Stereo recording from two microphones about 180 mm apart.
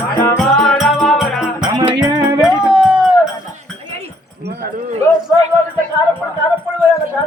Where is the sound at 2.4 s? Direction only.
5° right (ahead or behind).